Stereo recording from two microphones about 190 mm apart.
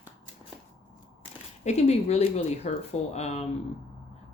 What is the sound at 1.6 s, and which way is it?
Speech, 35° left (ahead or behind).